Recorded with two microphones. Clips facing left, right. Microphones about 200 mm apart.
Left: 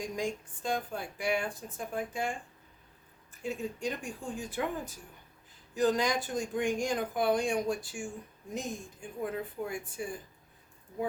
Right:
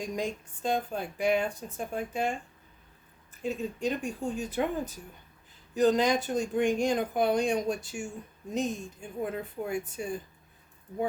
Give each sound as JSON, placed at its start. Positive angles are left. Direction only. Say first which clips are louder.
{"t": 0.0, "sound": "speech", "louder": "right 1 dB", "side_deg": -20}
{"t": 3.4, "sound": "speech", "louder": "right 4 dB", "side_deg": -20}
{"t": 5.7, "sound": "speech", "louder": "right 4 dB", "side_deg": -20}